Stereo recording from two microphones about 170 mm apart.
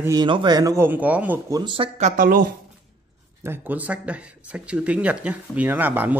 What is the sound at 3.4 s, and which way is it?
Speech, 10° right (ahead or behind).